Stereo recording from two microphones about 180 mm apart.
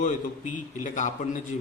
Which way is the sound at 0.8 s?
40° left (ahead or behind).